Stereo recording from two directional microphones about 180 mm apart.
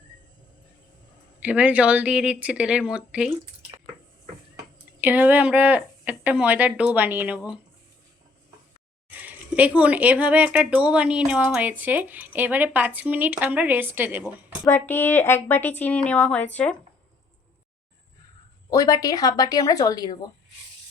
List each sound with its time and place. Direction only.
1.4 s speech: 5° right (ahead or behind)
4.9 s speech: 10° right (ahead or behind)
9.0 s speech: 10° right (ahead or behind)
14.6 s a woman's voice: 10° left (ahead or behind)
18.7 s speech: 20° left (ahead or behind)